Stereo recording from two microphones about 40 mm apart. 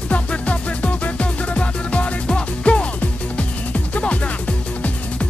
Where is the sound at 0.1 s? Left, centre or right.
Left.